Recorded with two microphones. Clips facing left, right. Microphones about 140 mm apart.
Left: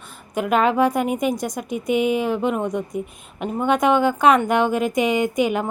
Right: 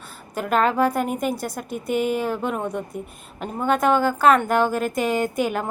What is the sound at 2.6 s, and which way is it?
Speech, 15° left (ahead or behind).